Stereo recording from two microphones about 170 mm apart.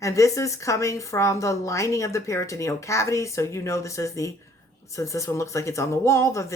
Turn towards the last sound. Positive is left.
turn(degrees=15)  # may be behind; listen again after turning